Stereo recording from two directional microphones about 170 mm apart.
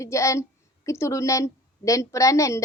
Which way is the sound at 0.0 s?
15° left (ahead or behind).